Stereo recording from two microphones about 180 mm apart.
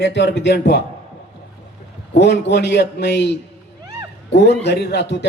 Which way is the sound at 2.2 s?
70° left (ahead or behind).